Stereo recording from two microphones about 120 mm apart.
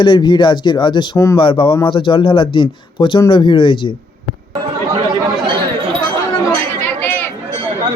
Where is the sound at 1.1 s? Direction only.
25° left (ahead or behind).